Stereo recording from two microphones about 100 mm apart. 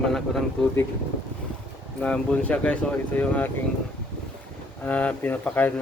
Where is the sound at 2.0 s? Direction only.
15° left (ahead or behind).